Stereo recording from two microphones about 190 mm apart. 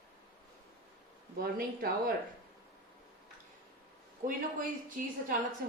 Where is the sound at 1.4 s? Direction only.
50° right (ahead or behind).